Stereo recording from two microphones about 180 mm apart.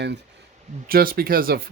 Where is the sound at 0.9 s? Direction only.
55° right (ahead or behind).